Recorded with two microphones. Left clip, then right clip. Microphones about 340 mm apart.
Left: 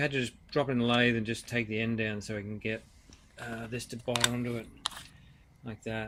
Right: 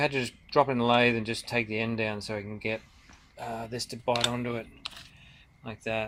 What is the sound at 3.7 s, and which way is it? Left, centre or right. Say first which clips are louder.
Speech: right 4 dB; centre.